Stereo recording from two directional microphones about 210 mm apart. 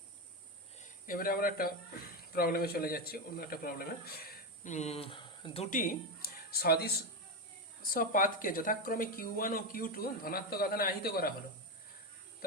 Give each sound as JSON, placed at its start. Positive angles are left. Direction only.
{"t": 1.0, "sound": "speech", "side_deg": 45}
{"t": 5.7, "sound": "speech", "side_deg": 40}
{"t": 7.9, "sound": "speech", "side_deg": 40}